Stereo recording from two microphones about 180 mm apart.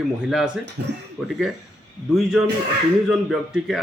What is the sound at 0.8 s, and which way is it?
Speech, 70° right (ahead or behind).